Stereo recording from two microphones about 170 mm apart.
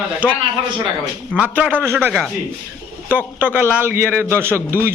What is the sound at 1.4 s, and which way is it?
Speech, 10° right (ahead or behind).